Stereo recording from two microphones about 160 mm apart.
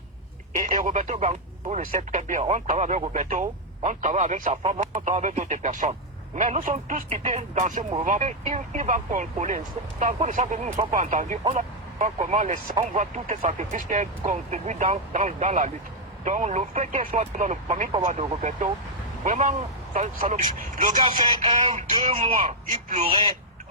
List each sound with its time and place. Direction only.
0.5 s speech: 55° right (ahead or behind)
4.6 s speech: 40° right (ahead or behind); by 7.0 s 55° right (ahead or behind)
7.1 s speech: 45° right (ahead or behind)
21.2 s a sound: 25° right (ahead or behind)
22.1 s speech: 35° right (ahead or behind)
22.7 s speech: 50° right (ahead or behind)
23.0 s a sound: 25° right (ahead or behind)